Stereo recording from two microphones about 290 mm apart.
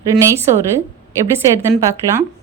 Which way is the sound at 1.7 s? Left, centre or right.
Centre.